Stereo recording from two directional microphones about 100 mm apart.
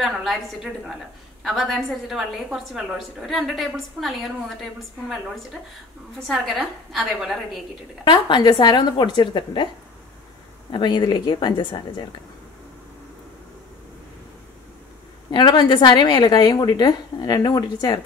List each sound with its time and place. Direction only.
0.0 s a woman's voice: centre (ahead or behind)
8.0 s a woman's voice: 50° left (ahead or behind)
10.7 s a woman's voice: 50° left (ahead or behind)
15.3 s a woman's voice: 50° left (ahead or behind)